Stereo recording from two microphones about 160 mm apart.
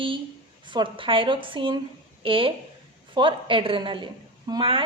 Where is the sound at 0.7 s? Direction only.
30° right (ahead or behind).